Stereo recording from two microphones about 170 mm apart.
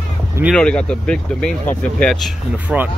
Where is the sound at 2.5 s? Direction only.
10° right (ahead or behind).